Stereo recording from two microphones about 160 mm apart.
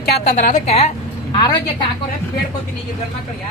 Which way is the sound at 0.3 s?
50° left (ahead or behind).